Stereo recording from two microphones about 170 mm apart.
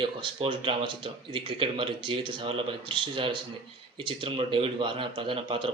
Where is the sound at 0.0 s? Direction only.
30° right (ahead or behind).